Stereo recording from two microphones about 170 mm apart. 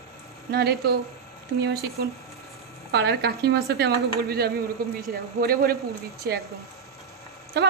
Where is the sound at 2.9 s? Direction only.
75° right (ahead or behind).